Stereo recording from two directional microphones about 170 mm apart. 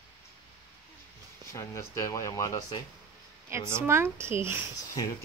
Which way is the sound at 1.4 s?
15° left (ahead or behind).